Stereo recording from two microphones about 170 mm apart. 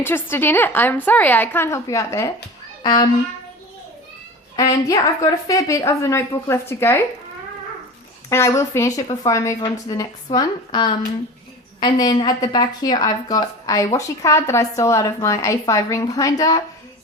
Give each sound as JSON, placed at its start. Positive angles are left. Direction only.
{"t": 0.0, "sound": "a woman's voice", "side_deg": 15}
{"t": 4.9, "sound": "a woman's voice", "side_deg": 20}
{"t": 8.3, "sound": "a woman's voice", "side_deg": 15}